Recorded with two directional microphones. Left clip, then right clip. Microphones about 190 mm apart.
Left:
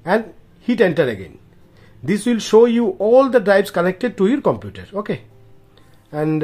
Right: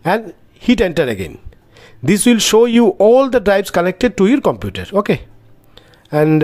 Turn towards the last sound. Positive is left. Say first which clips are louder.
# right 8 dB
turn(degrees=-40)  # may be behind; listen again after turning